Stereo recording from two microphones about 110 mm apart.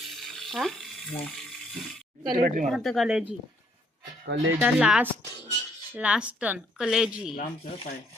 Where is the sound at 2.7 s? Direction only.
Centre (ahead or behind).